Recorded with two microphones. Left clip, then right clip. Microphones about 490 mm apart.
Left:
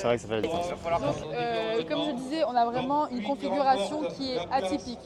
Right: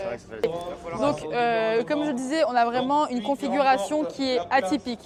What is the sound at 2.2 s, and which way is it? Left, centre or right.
Speech, right.